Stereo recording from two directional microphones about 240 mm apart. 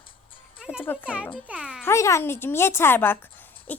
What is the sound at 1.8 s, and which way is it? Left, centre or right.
Speech, centre.